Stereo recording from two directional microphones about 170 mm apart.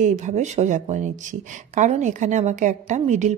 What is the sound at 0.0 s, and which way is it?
A woman's voice, 45° right (ahead or behind).